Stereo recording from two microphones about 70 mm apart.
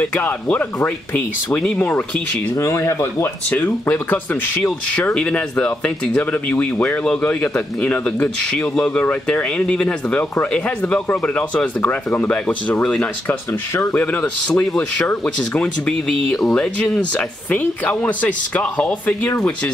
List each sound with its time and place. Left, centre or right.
0.0 s speech: left
2.5 s speech: left
3.4 s speech: left